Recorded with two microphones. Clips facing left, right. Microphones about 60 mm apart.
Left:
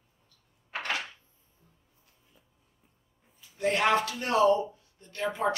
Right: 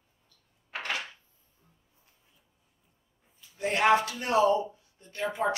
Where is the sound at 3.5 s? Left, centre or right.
Right.